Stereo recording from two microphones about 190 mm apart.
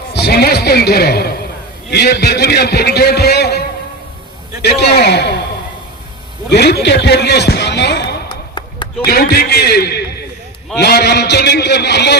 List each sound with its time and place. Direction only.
0.1 s a man's voice: 55° left (ahead or behind)
4.6 s a man's voice: 60° left (ahead or behind)
6.5 s a man's voice: 60° left (ahead or behind)
8.5 s a sound: 25° left (ahead or behind)
9.0 s a man's voice: 55° left (ahead or behind)